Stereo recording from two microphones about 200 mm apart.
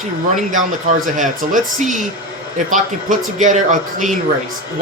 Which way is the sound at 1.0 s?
40° right (ahead or behind).